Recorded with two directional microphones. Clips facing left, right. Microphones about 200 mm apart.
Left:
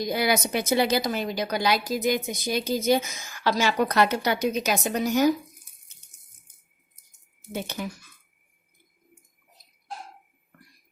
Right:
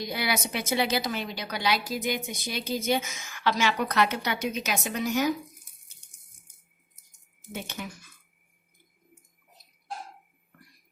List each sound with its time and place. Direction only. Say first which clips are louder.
0.0 s a woman's voice: left 6 dB; 45° left (ahead or behind)
7.5 s a woman's voice: left 5 dB; 35° left (ahead or behind)